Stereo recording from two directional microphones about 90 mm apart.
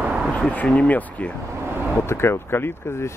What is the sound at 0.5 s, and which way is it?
Speech, 15° left (ahead or behind).